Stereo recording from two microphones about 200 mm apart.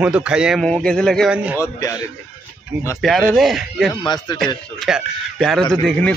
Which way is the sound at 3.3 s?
Centre (ahead or behind).